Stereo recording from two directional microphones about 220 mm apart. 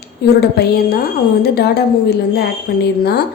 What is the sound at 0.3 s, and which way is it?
A woman's voice, 45° left (ahead or behind).